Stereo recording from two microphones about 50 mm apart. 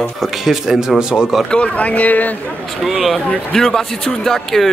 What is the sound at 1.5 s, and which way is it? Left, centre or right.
Speech, left.